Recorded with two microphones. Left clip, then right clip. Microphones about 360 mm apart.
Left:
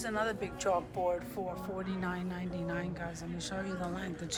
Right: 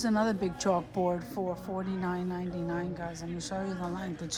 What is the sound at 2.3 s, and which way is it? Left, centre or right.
Speech, centre.